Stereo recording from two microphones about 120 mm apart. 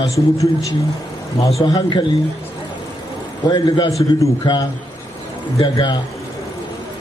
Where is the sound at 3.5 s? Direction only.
35° left (ahead or behind).